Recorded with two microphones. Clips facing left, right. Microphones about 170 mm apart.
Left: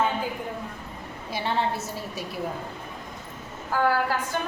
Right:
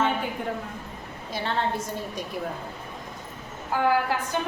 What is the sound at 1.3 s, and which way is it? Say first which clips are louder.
Speech: left 1 dB; 10° left (ahead or behind).